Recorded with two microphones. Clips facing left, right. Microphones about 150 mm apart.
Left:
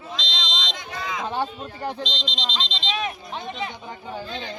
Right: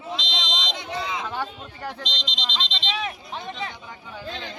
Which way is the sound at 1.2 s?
25° left (ahead or behind).